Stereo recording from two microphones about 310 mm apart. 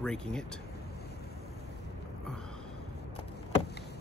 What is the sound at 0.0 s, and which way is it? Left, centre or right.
Speech, centre.